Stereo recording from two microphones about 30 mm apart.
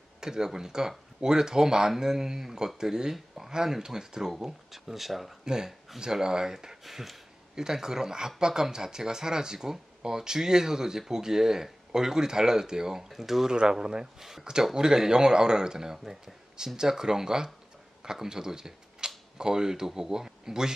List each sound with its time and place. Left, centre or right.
0.2 s speech: right
4.3 s speech: centre
5.4 s speech: right
6.8 s speech: centre
7.5 s speech: centre
13.1 s speech: centre
13.5 s speech: right